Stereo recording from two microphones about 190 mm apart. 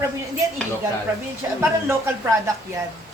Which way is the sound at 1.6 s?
15° right (ahead or behind).